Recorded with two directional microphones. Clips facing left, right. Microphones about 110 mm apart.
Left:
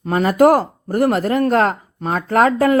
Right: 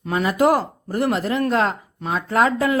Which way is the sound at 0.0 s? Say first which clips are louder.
Left 5 dB; 45° left (ahead or behind).